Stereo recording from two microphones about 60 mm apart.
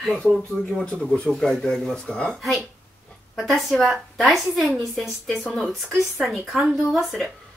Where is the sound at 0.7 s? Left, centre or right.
Centre.